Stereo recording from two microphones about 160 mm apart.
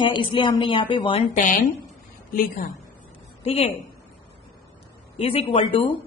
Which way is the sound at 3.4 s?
40° left (ahead or behind).